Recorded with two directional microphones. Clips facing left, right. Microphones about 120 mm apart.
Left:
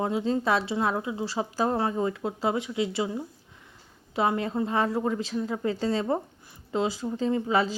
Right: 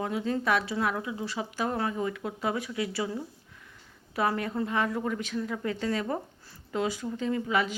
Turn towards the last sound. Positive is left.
turn(degrees=35)  # may be behind; listen again after turning